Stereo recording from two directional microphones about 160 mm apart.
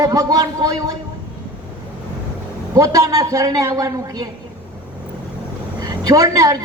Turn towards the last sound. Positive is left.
turn(degrees=-20)  # may be behind; listen again after turning